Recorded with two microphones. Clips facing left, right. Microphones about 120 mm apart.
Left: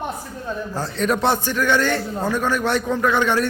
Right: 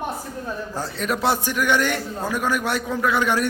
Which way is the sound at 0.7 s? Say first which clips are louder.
Left 5 dB; 5° right (ahead or behind).